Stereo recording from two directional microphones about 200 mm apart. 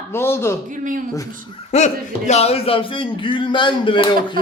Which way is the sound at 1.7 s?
35° left (ahead or behind).